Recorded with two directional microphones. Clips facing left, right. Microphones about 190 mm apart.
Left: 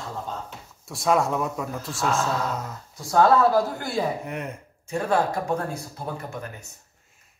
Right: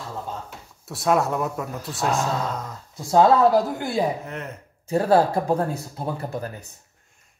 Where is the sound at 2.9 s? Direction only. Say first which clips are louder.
Right 2 dB; 20° right (ahead or behind).